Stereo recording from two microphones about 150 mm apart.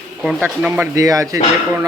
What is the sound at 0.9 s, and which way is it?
Speech, 20° right (ahead or behind).